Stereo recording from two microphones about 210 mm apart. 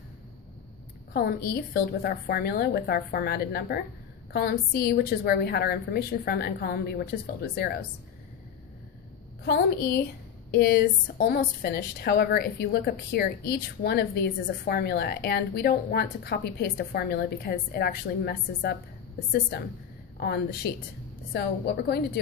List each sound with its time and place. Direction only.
1.1 s a woman's voice: 50° left (ahead or behind)
9.4 s a woman's voice: 50° left (ahead or behind)
20.2 s a woman's voice: 50° left (ahead or behind)